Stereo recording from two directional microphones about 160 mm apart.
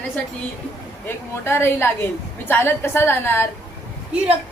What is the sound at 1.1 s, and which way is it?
A woman's voice, 15° left (ahead or behind).